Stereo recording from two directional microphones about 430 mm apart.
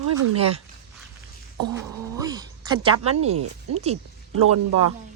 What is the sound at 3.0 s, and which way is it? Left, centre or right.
Speech, right.